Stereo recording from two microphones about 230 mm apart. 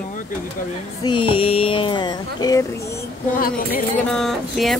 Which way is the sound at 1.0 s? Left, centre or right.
Left.